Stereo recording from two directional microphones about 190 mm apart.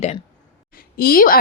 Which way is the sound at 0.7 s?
50° left (ahead or behind).